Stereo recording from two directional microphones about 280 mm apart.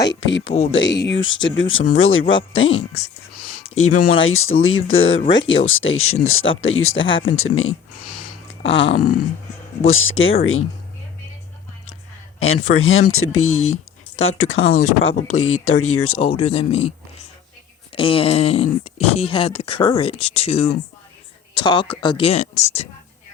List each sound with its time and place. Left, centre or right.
0.1 s speech: left
9.8 s speech: left
12.4 s a man's voice: left
16.2 s speech: centre
17.9 s speech: centre